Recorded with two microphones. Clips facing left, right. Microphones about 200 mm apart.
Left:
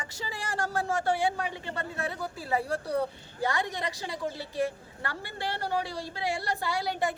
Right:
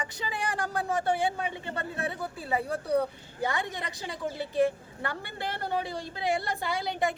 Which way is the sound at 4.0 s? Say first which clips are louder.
Right 1 dB; 20° right (ahead or behind).